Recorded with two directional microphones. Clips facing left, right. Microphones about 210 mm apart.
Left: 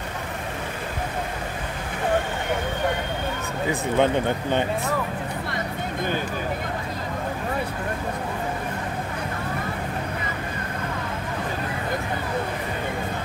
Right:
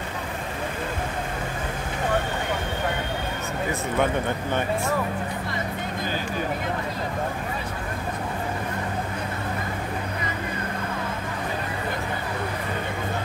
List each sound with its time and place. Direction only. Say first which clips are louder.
4.0 s speech: left 3 dB; 20° left (ahead or behind)